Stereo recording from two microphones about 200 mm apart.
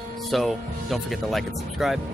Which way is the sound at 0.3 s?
Centre (ahead or behind).